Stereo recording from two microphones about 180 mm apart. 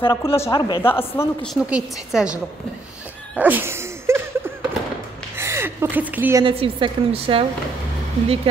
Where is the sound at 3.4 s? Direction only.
10° right (ahead or behind).